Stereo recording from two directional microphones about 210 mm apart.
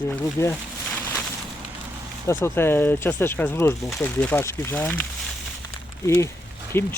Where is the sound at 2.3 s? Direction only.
10° left (ahead or behind).